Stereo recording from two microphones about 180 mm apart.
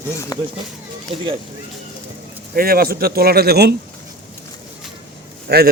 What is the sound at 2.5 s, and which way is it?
Speech, 55° right (ahead or behind).